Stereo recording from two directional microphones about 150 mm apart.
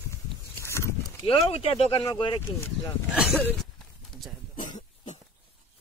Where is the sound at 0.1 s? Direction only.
20° left (ahead or behind).